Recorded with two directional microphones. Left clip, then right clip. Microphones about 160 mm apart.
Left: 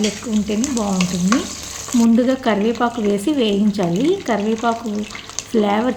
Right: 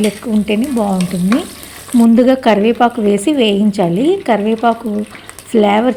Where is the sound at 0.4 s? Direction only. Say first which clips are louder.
Right 7 dB; 35° right (ahead or behind).